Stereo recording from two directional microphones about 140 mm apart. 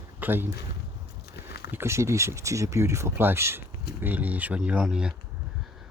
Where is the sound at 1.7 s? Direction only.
20° right (ahead or behind).